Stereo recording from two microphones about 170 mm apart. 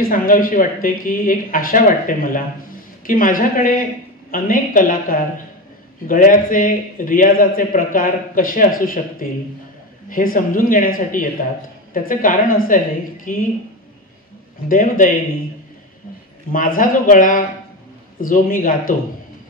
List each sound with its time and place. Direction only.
0.0 s a woman's voice: 55° left (ahead or behind)
14.7 s a woman's voice: 55° left (ahead or behind)
16.5 s a woman's voice: 55° left (ahead or behind)